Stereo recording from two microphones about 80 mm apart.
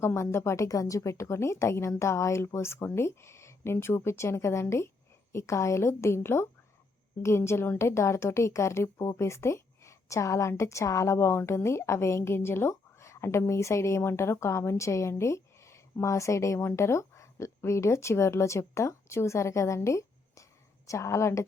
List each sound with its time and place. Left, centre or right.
0.0 s speech: left